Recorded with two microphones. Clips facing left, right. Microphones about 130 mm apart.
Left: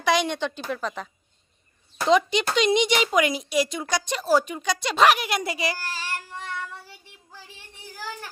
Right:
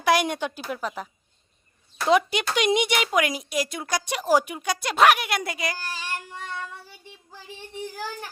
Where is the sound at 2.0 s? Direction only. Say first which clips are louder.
Left 1 dB; 10° right (ahead or behind).